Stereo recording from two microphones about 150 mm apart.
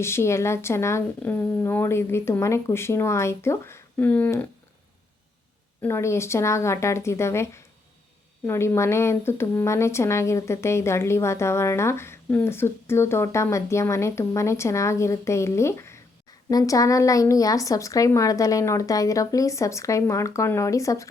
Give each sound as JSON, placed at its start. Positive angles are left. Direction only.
{"t": 0.0, "sound": "speech", "side_deg": 15}
{"t": 5.8, "sound": "a woman's voice", "side_deg": 15}